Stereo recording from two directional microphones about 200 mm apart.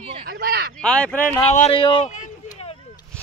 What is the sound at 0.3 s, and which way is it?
Speech, 50° right (ahead or behind).